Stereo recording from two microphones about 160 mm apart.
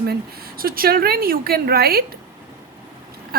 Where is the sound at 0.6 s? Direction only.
65° right (ahead or behind).